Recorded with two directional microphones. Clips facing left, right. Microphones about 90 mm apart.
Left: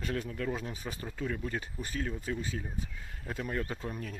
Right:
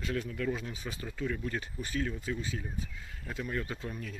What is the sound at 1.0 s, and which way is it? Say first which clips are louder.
Speech: right 1 dB; 30° left (ahead or behind).